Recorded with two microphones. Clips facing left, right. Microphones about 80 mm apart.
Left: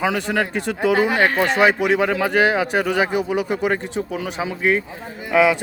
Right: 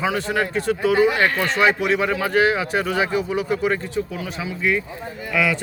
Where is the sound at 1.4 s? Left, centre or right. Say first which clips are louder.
Left 2 dB; centre.